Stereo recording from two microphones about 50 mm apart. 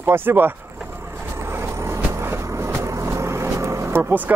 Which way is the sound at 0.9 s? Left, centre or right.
Right.